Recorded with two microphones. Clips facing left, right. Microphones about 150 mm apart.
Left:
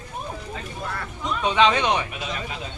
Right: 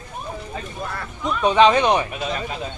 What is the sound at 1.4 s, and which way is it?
Speech, 40° right (ahead or behind).